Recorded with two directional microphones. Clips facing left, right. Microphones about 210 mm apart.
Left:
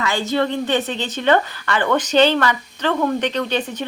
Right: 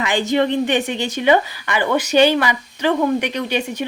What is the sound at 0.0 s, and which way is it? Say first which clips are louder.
A woman's voice: right 2 dB; 15° right (ahead or behind).